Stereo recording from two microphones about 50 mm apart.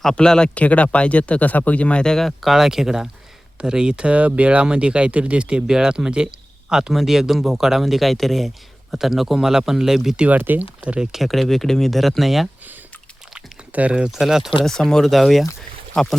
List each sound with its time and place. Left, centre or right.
0.0 s speech: centre
0.5 s speech: left
2.1 s speech: centre
2.5 s speech: centre
10.2 s speech: right
11.0 s speech: centre
13.7 s speech: right
14.0 s speech: centre
14.6 s speech: centre
15.0 s speech: centre